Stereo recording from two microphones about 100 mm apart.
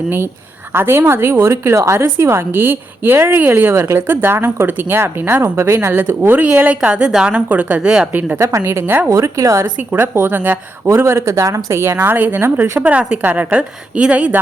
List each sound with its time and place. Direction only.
0.7 s a woman's voice: 25° right (ahead or behind)
8.4 s a woman's voice: 30° right (ahead or behind)
12.8 s a woman's voice: 15° right (ahead or behind)